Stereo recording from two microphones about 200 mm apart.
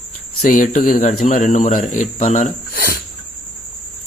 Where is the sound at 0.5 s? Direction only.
40° left (ahead or behind).